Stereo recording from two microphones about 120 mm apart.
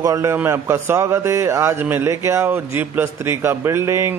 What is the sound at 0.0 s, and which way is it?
A man's voice, 25° right (ahead or behind).